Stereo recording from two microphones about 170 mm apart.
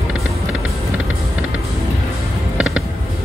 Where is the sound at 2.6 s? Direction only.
5° right (ahead or behind).